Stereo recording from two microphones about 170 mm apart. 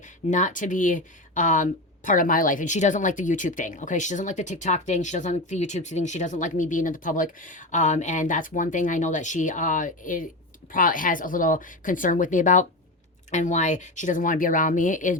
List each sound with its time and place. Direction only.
0.3 s speech: 45° left (ahead or behind)